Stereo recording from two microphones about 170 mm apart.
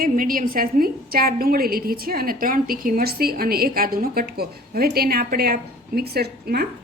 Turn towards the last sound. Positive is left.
turn(degrees=-65)  # may be behind; listen again after turning